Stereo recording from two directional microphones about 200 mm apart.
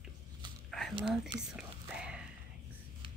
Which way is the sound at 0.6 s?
Centre (ahead or behind).